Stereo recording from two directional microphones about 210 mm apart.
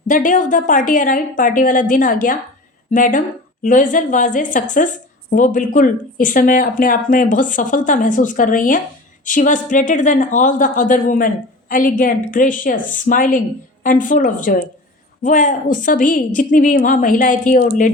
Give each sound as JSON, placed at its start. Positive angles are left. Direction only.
{"t": 0.1, "sound": "speech", "side_deg": 35}